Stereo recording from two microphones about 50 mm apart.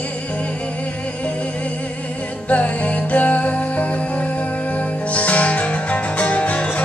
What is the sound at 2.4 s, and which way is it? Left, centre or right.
Music, left.